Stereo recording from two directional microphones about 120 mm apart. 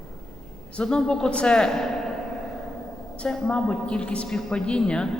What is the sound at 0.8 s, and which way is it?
Speech, 5° left (ahead or behind).